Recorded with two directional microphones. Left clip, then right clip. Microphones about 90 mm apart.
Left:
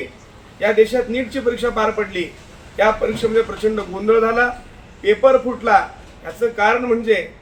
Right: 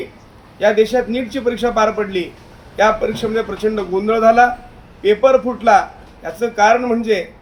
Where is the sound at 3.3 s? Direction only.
15° right (ahead or behind).